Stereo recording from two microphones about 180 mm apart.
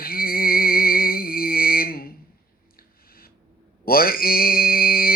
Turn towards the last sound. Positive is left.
turn(degrees=55)  # may be behind; listen again after turning